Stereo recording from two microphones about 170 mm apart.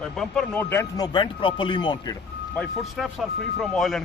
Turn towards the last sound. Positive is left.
turn(degrees=0)  # may be behind; listen again after turning